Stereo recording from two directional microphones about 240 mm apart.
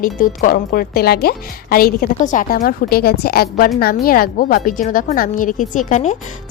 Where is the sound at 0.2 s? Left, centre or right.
Left.